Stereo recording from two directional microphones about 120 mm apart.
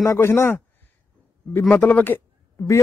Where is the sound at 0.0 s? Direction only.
25° left (ahead or behind).